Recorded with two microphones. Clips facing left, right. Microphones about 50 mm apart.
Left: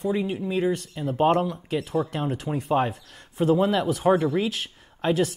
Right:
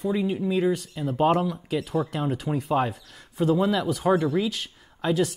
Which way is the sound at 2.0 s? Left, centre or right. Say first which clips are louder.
Even; centre.